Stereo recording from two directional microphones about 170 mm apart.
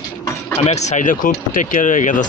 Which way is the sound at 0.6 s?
40° left (ahead or behind).